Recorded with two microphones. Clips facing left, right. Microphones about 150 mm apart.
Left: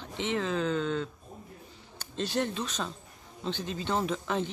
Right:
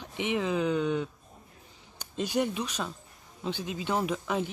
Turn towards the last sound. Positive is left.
turn(degrees=-10)  # may be behind; listen again after turning